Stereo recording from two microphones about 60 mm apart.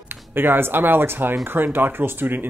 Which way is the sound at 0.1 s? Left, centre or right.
Right.